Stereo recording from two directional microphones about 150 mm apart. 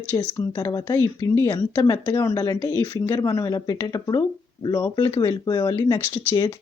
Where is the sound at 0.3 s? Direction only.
25° left (ahead or behind).